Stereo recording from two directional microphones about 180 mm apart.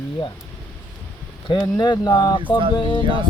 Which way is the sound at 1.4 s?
25° left (ahead or behind).